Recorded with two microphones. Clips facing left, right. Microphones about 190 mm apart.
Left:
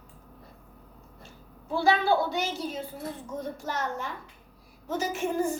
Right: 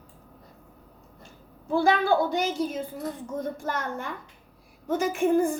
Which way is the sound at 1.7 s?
50° right (ahead or behind).